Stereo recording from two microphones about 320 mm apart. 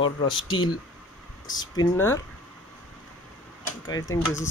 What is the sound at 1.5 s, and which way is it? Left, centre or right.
Speech, centre.